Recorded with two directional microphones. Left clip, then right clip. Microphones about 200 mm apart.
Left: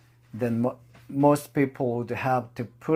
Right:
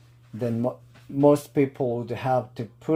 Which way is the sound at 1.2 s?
25° left (ahead or behind).